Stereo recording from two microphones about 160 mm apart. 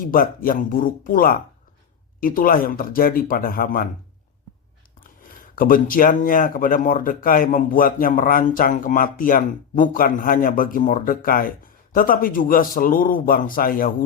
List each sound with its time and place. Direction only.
0.0 s speech: 65° left (ahead or behind)
4.9 s speech: 60° left (ahead or behind)